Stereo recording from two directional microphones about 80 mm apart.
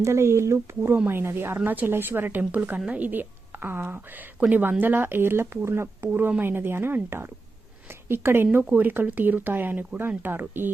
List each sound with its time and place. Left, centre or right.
0.0 s a woman's voice: right